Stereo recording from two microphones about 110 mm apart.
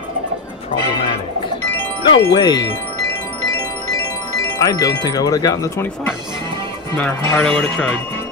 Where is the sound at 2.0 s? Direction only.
45° left (ahead or behind).